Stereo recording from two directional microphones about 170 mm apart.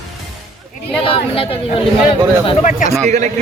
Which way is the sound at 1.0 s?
30° left (ahead or behind).